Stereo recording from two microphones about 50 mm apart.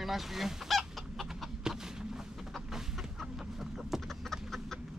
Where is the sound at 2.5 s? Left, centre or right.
Centre.